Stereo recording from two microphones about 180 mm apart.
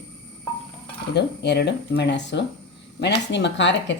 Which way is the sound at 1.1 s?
70° left (ahead or behind).